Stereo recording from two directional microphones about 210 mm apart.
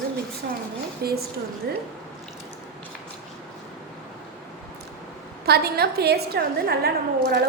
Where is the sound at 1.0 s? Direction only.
50° right (ahead or behind).